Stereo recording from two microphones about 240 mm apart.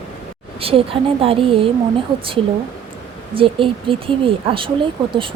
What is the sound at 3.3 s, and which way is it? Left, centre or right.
Speech, right.